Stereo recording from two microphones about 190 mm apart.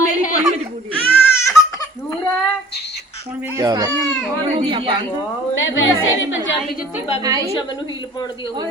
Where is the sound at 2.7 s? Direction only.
60° left (ahead or behind).